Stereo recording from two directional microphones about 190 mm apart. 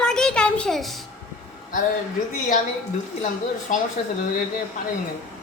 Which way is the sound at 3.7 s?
45° left (ahead or behind).